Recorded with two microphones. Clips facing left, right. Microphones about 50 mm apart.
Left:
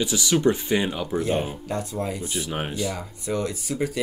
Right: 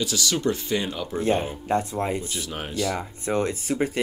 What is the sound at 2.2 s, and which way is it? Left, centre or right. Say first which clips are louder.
Speech: left 3 dB; left.